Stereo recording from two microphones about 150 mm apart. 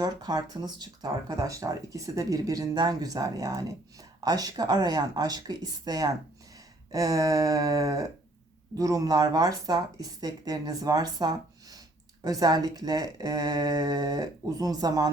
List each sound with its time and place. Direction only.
0.0 s speech: 25° right (ahead or behind)